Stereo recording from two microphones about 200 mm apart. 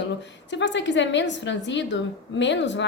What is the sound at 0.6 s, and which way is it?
A woman's voice, 65° left (ahead or behind).